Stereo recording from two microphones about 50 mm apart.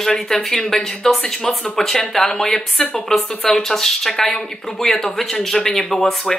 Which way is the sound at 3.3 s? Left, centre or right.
Left.